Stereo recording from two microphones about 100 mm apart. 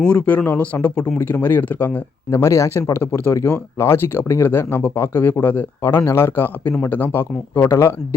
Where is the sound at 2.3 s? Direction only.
30° left (ahead or behind).